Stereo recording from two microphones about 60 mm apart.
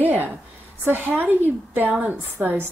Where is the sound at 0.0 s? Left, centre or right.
Right.